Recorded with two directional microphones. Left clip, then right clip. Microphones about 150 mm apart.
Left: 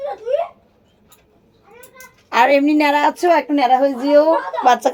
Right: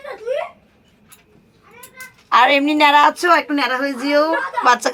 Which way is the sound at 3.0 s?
50° right (ahead or behind).